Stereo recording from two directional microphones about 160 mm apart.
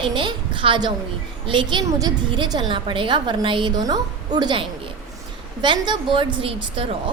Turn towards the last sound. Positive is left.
turn(degrees=-30)  # may be behind; listen again after turning